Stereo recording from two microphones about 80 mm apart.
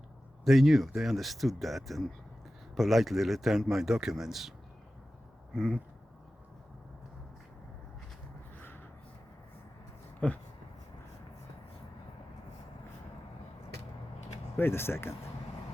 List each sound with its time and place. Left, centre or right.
0.4 s speech: centre
5.5 s speech: centre
8.5 s a sound: left
10.2 s speech: centre
14.5 s speech: left